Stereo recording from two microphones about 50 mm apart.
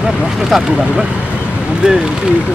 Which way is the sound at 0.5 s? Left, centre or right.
Centre.